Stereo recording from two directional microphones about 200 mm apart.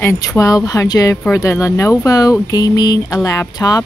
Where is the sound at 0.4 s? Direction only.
15° left (ahead or behind).